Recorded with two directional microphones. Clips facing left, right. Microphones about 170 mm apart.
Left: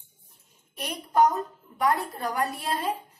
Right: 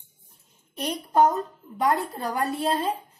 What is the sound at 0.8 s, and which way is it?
A woman's voice, 25° right (ahead or behind).